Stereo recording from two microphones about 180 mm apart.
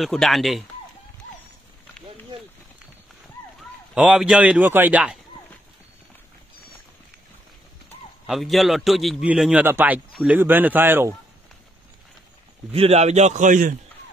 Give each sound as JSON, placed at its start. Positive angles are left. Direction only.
{"t": 0.0, "sound": "a man's voice", "side_deg": 0}
{"t": 3.9, "sound": "a man's voice", "side_deg": -5}
{"t": 8.3, "sound": "a man's voice", "side_deg": 0}
{"t": 12.7, "sound": "a man's voice", "side_deg": -35}